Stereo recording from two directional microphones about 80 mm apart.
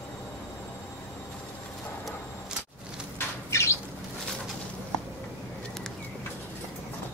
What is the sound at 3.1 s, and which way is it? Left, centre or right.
Bird, left.